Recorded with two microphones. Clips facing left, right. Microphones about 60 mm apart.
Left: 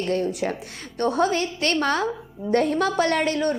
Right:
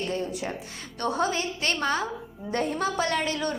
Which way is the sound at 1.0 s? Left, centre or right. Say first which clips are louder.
Left 5 dB; left.